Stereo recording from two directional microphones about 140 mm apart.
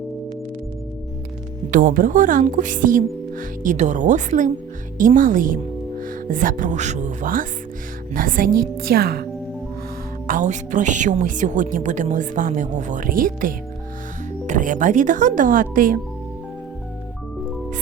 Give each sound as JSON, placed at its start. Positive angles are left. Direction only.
{"t": 1.7, "sound": "a woman's voice", "side_deg": -75}
{"t": 10.2, "sound": "a woman's voice", "side_deg": -65}
{"t": 14.4, "sound": "speech", "side_deg": -65}